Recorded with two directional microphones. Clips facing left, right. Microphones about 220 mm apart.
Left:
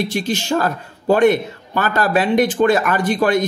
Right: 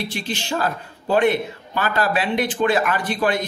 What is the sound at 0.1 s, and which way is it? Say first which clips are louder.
A man's voice: left 7 dB; 45° left (ahead or behind).